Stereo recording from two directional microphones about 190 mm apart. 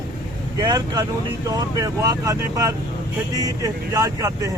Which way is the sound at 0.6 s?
20° right (ahead or behind).